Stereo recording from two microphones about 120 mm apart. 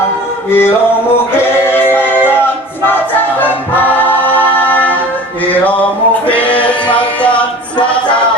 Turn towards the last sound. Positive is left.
turn(degrees=10)  # may be behind; listen again after turning